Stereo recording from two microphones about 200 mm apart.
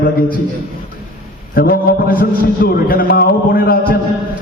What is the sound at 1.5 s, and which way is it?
A man's voice, 45° left (ahead or behind).